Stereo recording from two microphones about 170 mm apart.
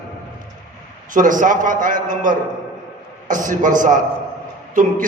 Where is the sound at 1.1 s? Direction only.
50° right (ahead or behind).